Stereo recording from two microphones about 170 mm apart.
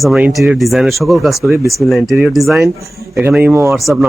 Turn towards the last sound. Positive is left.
turn(degrees=0)  # may be behind; listen again after turning